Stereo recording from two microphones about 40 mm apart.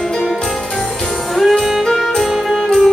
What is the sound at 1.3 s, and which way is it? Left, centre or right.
Music, centre.